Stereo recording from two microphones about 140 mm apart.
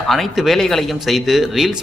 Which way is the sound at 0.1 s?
Centre (ahead or behind).